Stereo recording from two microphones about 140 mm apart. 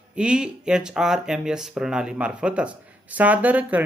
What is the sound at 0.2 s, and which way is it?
Speech, 5° right (ahead or behind).